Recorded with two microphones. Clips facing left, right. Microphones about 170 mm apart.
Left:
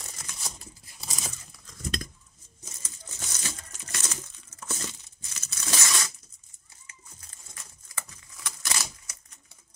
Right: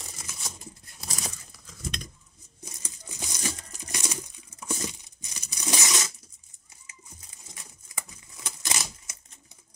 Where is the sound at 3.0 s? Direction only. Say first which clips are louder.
Right 5 dB; 15° right (ahead or behind).